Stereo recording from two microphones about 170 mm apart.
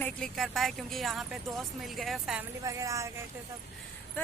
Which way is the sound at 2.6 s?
20° right (ahead or behind).